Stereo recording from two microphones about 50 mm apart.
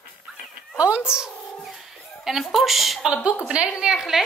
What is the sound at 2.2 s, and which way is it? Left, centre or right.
Speech, centre.